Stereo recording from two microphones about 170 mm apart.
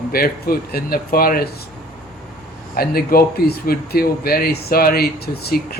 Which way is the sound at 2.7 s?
65° left (ahead or behind).